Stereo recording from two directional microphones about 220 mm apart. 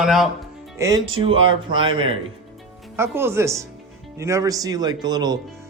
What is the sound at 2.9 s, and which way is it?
Speech, 10° right (ahead or behind).